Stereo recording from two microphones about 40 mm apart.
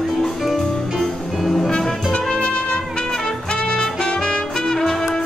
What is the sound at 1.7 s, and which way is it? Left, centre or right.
Music, centre.